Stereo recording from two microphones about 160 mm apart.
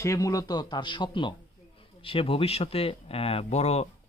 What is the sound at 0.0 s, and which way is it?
A man's voice, 20° left (ahead or behind).